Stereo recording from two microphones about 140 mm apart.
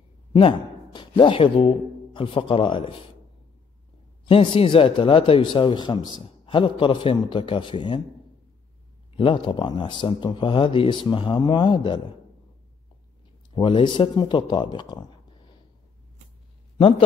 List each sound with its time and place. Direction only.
0.3 s speech: 40° left (ahead or behind)
4.3 s speech: 40° left (ahead or behind)
9.1 s speech: 40° left (ahead or behind)
13.6 s speech: 35° left (ahead or behind)